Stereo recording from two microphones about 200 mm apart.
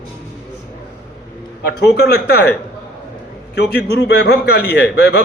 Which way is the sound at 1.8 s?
55° left (ahead or behind).